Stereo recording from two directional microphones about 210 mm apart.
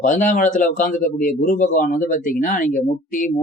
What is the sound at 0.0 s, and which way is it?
Speech, 35° left (ahead or behind).